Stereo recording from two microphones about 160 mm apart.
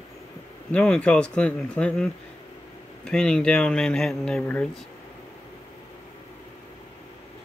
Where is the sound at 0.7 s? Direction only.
5° left (ahead or behind).